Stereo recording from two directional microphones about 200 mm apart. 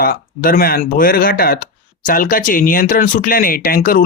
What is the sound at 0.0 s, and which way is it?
Speech, 45° left (ahead or behind).